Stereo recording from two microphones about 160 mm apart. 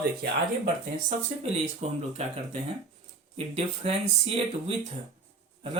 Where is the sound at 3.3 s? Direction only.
35° right (ahead or behind).